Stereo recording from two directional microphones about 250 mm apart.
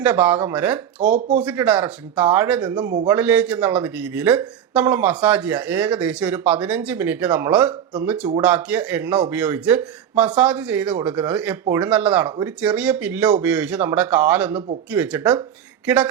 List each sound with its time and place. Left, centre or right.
0.0 s speech: centre
1.0 s speech: right
1.4 s speech: centre
3.1 s speech: centre